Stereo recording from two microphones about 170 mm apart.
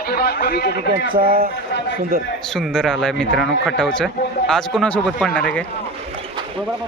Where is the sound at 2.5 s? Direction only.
5° left (ahead or behind).